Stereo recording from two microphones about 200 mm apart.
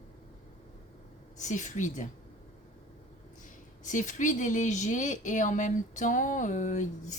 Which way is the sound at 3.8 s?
40° left (ahead or behind).